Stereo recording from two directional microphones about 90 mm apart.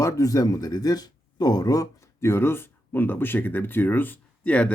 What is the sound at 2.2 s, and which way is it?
Speech, 30° left (ahead or behind).